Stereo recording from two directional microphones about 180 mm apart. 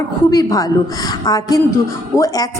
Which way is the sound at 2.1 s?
20° left (ahead or behind).